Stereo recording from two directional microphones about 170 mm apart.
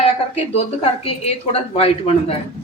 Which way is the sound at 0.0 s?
40° left (ahead or behind).